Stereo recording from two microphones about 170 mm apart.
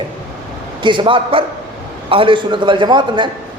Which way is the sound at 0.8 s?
30° right (ahead or behind).